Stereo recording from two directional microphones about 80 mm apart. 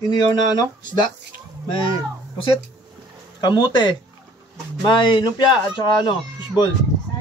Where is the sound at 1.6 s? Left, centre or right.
Left.